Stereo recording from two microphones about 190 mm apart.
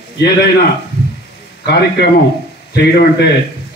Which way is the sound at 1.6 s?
60° left (ahead or behind).